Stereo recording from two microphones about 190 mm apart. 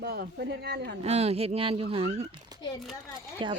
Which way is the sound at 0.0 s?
55° right (ahead or behind).